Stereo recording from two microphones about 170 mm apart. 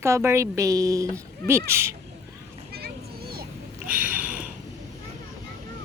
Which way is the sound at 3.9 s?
10° right (ahead or behind).